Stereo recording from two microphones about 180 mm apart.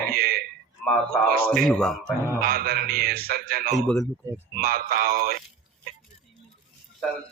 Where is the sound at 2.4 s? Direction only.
55° right (ahead or behind).